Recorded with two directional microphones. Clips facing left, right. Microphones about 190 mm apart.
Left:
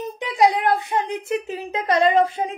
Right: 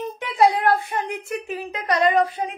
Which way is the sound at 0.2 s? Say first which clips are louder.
Even; 15° left (ahead or behind).